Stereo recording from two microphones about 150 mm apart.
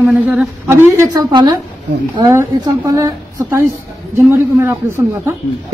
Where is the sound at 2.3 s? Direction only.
20° right (ahead or behind).